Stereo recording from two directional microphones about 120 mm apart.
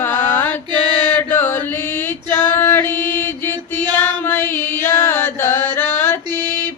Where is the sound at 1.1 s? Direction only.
15° left (ahead or behind).